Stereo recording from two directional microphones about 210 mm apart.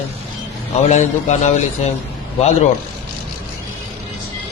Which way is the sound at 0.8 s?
35° left (ahead or behind).